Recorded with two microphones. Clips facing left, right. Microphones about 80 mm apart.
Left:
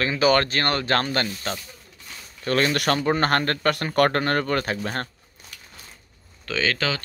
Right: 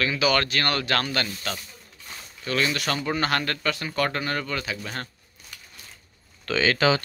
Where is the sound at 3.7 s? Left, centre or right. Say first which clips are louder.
Left 6 dB; left.